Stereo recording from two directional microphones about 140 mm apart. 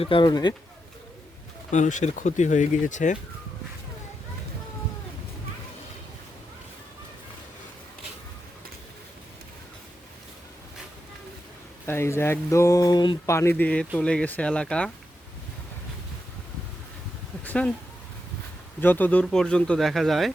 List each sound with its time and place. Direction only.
0.0 s speech: 35° left (ahead or behind)
1.7 s speech: 60° left (ahead or behind)
11.9 s speech: 20° left (ahead or behind)
13.2 s speech: 20° left (ahead or behind)
17.4 s a sound: 10° left (ahead or behind)
18.8 s speech: 15° left (ahead or behind)